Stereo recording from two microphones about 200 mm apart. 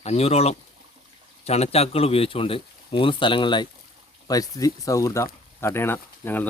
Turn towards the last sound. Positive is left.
turn(degrees=10)  # may be behind; listen again after turning